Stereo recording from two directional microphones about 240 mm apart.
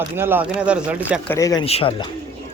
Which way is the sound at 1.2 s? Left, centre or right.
Centre.